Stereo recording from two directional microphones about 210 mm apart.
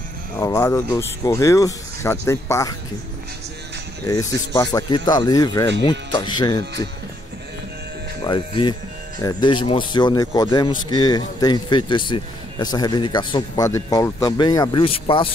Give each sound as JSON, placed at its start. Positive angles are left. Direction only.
{"t": 0.4, "sound": "speech", "side_deg": 15}
{"t": 4.1, "sound": "a man's voice", "side_deg": 15}
{"t": 8.2, "sound": "a man's voice", "side_deg": 20}